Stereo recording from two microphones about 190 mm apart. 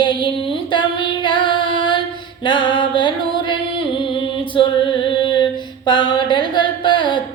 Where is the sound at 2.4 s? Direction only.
25° left (ahead or behind).